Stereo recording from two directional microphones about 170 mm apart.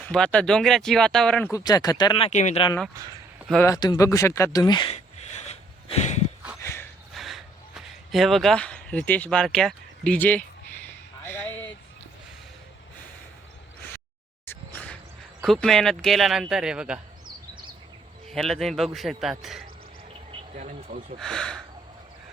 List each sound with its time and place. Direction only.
0.1 s speech: 5° left (ahead or behind)
1.5 s speech: 20° left (ahead or behind); by 2.6 s 45° left (ahead or behind)
3.7 s speech: 20° left (ahead or behind)
4.9 s a sound: 40° left (ahead or behind)
6.6 s snort: 15° left (ahead or behind)
7.1 s a sound: centre (ahead or behind)
14.5 s a sound: 10° left (ahead or behind)
15.4 s speech: centre (ahead or behind)
18.3 s speech: centre (ahead or behind)
20.6 s speech: 45° right (ahead or behind)
21.2 s speech: 5° left (ahead or behind)